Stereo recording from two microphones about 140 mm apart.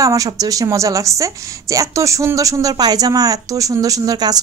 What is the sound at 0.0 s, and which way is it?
A woman's voice, 25° right (ahead or behind).